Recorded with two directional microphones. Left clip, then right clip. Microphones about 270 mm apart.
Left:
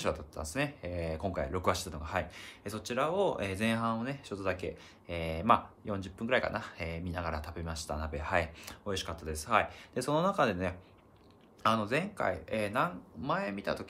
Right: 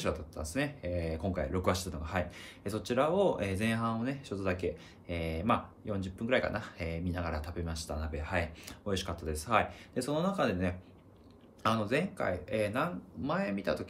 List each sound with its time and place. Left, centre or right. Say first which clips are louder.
0.0 s speech: left 1 dB; centre